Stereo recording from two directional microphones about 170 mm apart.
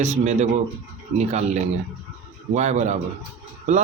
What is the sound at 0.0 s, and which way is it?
A man's voice, 40° right (ahead or behind).